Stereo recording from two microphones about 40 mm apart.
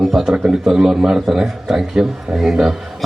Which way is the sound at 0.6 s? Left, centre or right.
Centre.